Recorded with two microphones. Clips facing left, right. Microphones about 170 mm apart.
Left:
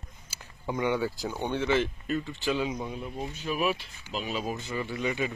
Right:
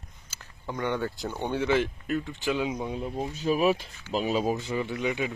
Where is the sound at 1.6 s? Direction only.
10° right (ahead or behind).